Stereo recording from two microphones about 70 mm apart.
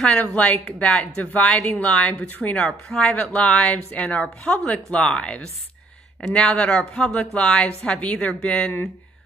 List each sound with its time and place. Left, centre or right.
0.0 s a woman's voice: centre